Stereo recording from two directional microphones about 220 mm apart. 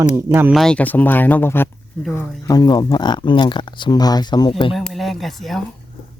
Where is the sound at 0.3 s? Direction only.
5° right (ahead or behind); by 4.7 s 20° left (ahead or behind).